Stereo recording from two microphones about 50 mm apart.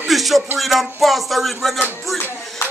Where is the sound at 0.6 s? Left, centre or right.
Centre.